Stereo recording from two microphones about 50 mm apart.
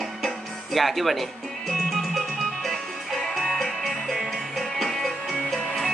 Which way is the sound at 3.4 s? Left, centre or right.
Centre.